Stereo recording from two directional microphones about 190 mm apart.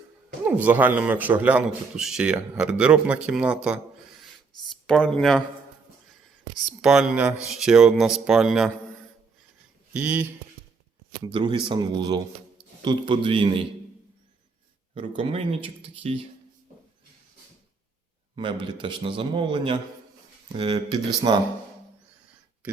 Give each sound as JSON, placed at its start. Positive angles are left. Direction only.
{"t": 0.4, "sound": "a man's voice", "side_deg": -10}
{"t": 4.9, "sound": "speech", "side_deg": 5}
{"t": 6.7, "sound": "speech", "side_deg": -5}
{"t": 9.9, "sound": "a man's voice", "side_deg": -10}
{"t": 11.2, "sound": "speech", "side_deg": -25}
{"t": 14.9, "sound": "speech", "side_deg": -30}
{"t": 18.6, "sound": "speech", "side_deg": -25}